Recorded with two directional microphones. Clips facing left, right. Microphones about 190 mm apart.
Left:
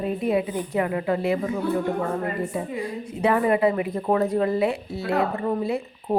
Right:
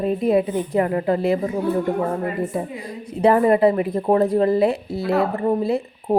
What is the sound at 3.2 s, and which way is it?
A woman's voice, 35° right (ahead or behind).